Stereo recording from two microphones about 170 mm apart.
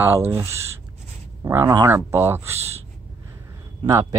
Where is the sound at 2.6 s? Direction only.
40° right (ahead or behind).